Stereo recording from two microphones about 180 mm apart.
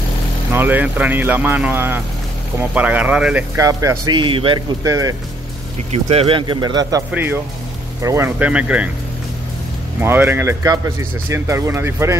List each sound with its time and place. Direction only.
0.5 s speech: 10° right (ahead or behind)
3.5 s speech: 15° right (ahead or behind)
5.9 s speech: 35° right (ahead or behind)
7.1 s speech: 10° right (ahead or behind)
9.9 s speech: 10° right (ahead or behind)